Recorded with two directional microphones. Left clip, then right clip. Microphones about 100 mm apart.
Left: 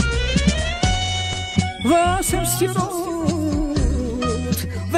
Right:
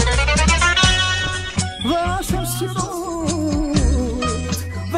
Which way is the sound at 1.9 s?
35° left (ahead or behind).